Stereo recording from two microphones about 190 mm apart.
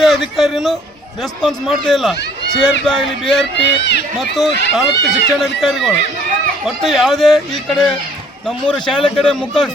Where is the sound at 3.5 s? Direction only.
65° left (ahead or behind).